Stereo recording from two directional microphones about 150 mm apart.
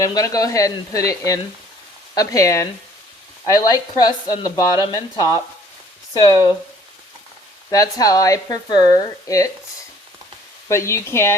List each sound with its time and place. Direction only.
0.0 s speech: 25° left (ahead or behind)
7.7 s speech: 25° left (ahead or behind)
10.7 s speech: 20° left (ahead or behind)